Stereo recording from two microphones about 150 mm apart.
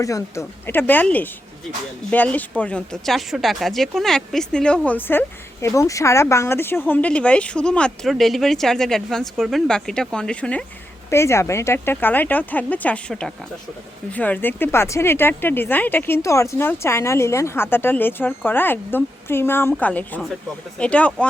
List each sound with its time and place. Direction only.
0.0 s a woman's voice: 20° left (ahead or behind)
11.1 s speech: 15° left (ahead or behind)